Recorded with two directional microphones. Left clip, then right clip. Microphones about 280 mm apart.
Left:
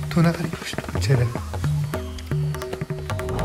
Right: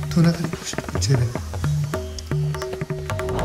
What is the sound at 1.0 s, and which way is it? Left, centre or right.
Music, centre.